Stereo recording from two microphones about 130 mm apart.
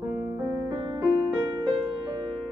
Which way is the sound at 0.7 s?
35° right (ahead or behind).